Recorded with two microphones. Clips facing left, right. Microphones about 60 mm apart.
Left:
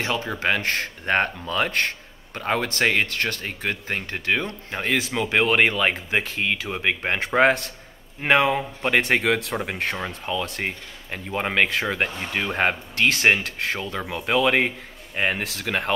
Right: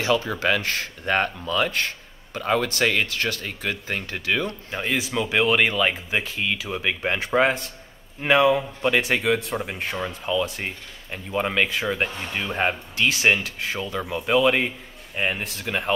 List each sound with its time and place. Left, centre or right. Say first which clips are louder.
0.6 s speech: left 2 dB; left
1.0 s speech: even; left
1.7 s a sound: left 2 dB; left
2.4 s speech: right 1 dB; left
4.8 s speech: left 1 dB; left
6.7 s speech: left 1 dB; left
10.0 s speech: right 3 dB; left